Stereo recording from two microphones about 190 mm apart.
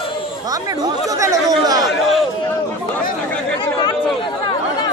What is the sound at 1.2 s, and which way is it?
Speech, 20° right (ahead or behind).